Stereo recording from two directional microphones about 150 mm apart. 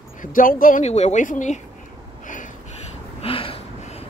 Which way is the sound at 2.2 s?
60° left (ahead or behind).